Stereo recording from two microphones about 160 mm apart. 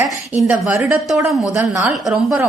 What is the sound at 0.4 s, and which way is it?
Speech, centre (ahead or behind).